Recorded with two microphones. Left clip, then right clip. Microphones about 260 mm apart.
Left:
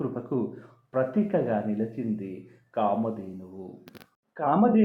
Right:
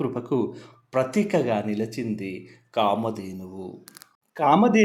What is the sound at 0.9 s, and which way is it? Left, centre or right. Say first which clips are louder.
Speech: right 3 dB; right.